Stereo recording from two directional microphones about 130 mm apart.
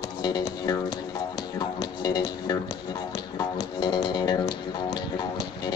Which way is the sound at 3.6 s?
30° left (ahead or behind).